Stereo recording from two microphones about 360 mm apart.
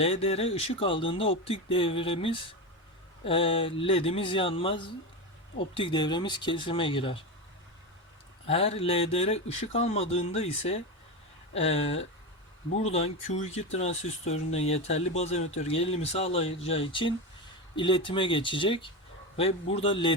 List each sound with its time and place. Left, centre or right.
0.0 s speech: centre
8.4 s speech: centre